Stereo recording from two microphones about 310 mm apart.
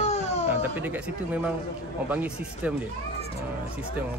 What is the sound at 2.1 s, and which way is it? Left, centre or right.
Speech, centre.